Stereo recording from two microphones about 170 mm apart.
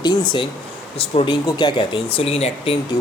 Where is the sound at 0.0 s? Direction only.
25° left (ahead or behind).